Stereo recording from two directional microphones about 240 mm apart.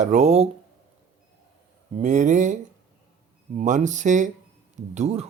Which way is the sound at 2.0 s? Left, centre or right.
Right.